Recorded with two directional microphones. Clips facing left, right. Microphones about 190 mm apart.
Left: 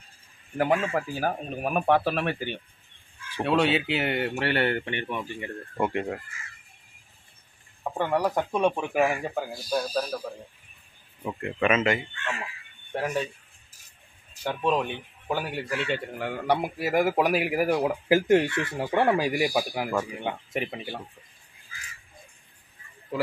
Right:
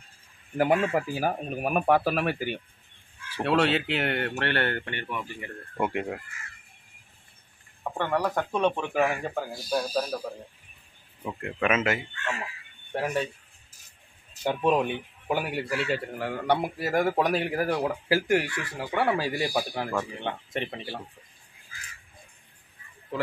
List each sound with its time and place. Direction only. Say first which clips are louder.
0.6 s speech: right 1 dB; 5° right (ahead or behind); by 5.5 s 25° left (ahead or behind)
5.8 s speech: left 1 dB; 5° right (ahead or behind)
7.8 s speech: left 2 dB; 10° left (ahead or behind)
11.2 s speech: left 2 dB; centre (ahead or behind)
14.4 s speech: right 2 dB; 15° right (ahead or behind); by 20.8 s 5° left (ahead or behind)